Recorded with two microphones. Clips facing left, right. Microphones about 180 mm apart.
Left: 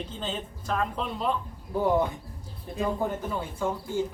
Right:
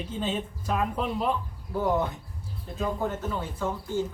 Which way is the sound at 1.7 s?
15° left (ahead or behind).